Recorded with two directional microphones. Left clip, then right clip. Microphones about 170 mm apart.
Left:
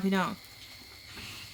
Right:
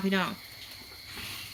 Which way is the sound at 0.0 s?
25° left (ahead or behind).